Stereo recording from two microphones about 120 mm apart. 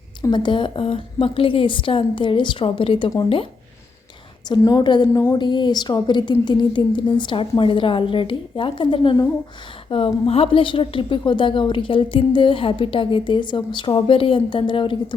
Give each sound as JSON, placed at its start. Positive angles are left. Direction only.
{"t": 0.2, "sound": "a woman's voice", "side_deg": 40}
{"t": 4.4, "sound": "a woman's voice", "side_deg": 35}